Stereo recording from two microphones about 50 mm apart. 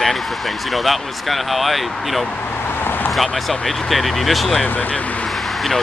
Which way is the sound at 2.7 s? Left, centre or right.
Left.